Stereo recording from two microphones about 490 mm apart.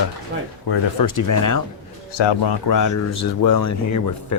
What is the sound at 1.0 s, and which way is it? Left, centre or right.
Speech, left.